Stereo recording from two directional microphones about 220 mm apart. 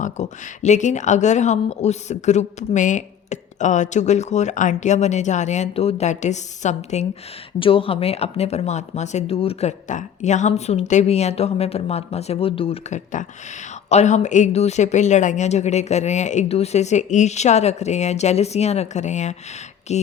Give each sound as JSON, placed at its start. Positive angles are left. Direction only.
{"t": 0.0, "sound": "speech", "side_deg": 30}